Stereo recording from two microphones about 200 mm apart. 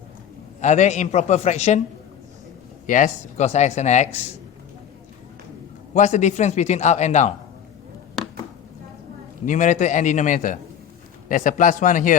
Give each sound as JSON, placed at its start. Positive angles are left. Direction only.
{"t": 0.6, "sound": "a man's voice", "side_deg": 35}
{"t": 2.8, "sound": "a man's voice", "side_deg": 40}
{"t": 5.9, "sound": "a man's voice", "side_deg": 35}
{"t": 9.5, "sound": "a man's voice", "side_deg": 40}